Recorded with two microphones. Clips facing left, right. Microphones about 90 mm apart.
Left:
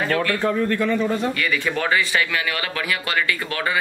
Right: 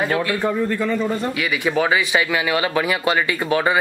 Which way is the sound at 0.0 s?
15° right (ahead or behind).